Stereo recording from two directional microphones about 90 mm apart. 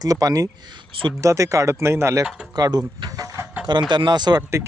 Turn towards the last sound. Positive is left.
turn(degrees=-30)  # may be behind; listen again after turning